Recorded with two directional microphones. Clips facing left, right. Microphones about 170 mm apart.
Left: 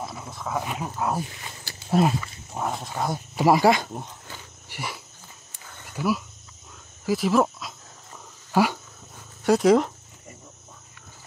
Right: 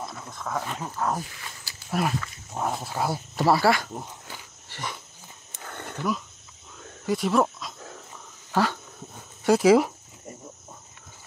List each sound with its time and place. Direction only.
0.0 s speech: 5° left (ahead or behind)
1.9 s speech: 25° left (ahead or behind)
2.5 s speech: centre (ahead or behind)
3.3 s speech: 15° left (ahead or behind)
4.6 s wild animals: 10° left (ahead or behind)
5.7 s a sound: 65° right (ahead or behind)
5.9 s speech: 5° left (ahead or behind)
8.5 s dog: 10° left (ahead or behind)
9.4 s speech: centre (ahead or behind)